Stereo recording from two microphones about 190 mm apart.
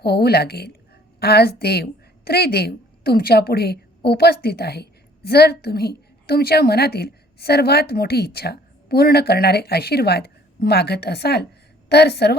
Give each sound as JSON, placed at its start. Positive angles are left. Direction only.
{"t": 0.0, "sound": "a woman's voice", "side_deg": 55}